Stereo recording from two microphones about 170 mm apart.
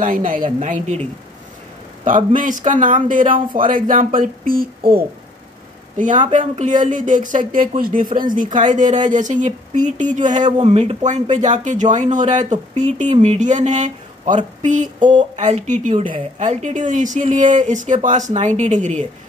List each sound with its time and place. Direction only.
0.0 s speech: 50° right (ahead or behind)
2.0 s speech: 50° right (ahead or behind)
5.9 s speech: 45° right (ahead or behind)